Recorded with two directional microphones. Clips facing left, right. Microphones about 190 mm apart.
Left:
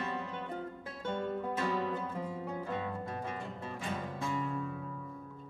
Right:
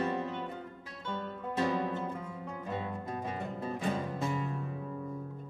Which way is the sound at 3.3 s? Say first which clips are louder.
Right 4 dB; 35° right (ahead or behind).